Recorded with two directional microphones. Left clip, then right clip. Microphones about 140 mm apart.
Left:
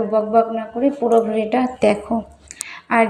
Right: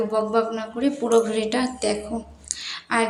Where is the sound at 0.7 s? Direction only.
25° left (ahead or behind).